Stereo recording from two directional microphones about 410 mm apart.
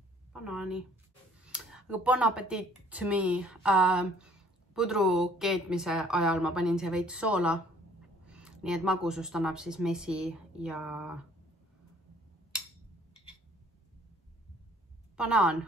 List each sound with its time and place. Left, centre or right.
0.3 s speech: centre
15.1 s speech: centre